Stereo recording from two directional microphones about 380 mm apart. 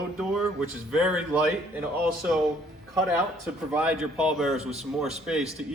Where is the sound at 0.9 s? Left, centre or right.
Centre.